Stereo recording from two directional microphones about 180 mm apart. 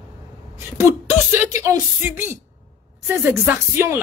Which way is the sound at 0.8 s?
15° right (ahead or behind).